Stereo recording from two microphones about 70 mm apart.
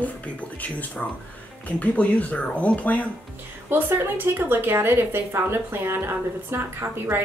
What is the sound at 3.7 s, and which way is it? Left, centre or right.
A woman's voice, right.